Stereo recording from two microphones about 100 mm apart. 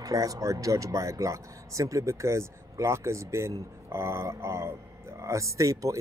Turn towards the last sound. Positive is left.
turn(degrees=-35)  # may be behind; listen again after turning